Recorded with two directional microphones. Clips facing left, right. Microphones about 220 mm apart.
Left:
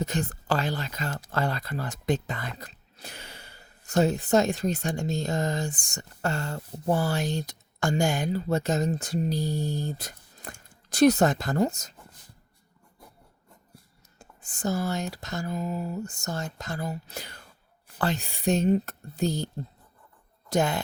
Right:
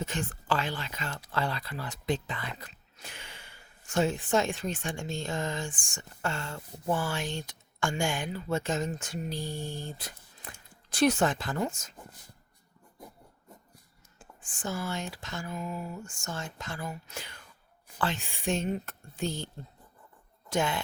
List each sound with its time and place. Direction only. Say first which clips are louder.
0.0 s speech: left 5 dB; 40° left (ahead or behind)
14.2 s speech: left 7 dB; 40° left (ahead or behind)
20.5 s speech: left 4 dB; 40° left (ahead or behind)